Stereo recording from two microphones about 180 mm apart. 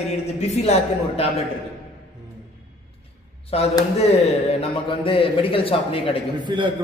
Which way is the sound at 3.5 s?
35° left (ahead or behind).